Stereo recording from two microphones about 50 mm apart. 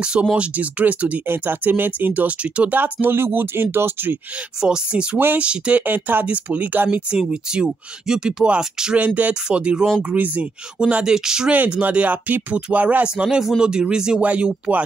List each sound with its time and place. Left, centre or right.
0.0 s speech: centre
1.2 s speech: right
2.8 s speech: right
4.6 s speech: centre
5.9 s speech: right
7.1 s speech: centre
8.9 s speech: right
10.1 s speech: right
11.1 s speech: centre
11.8 s speech: right; by 14.2 s centre
14.2 s speech: right